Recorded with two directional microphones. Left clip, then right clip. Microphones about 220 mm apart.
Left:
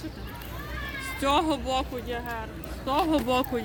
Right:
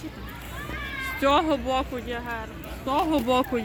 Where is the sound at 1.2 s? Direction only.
40° right (ahead or behind).